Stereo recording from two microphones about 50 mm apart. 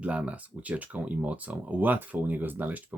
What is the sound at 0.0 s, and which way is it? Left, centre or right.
Speech, right.